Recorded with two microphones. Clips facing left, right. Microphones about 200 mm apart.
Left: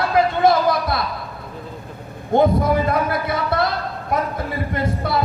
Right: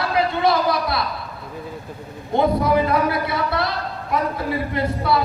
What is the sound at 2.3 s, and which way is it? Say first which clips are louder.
Speech: left 4 dB; 50° left (ahead or behind).